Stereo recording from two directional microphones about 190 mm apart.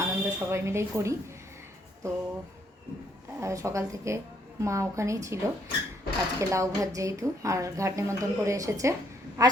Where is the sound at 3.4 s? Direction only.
15° right (ahead or behind).